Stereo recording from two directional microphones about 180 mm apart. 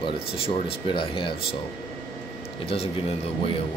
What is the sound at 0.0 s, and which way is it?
Speech, 30° left (ahead or behind).